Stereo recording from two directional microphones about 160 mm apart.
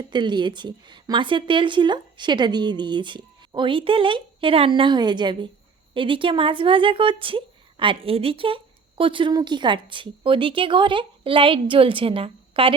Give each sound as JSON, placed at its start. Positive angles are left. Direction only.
{"t": 0.1, "sound": "a woman's voice", "side_deg": -30}